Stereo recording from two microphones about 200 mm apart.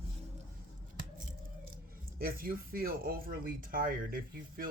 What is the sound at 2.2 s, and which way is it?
Speech, 45° right (ahead or behind).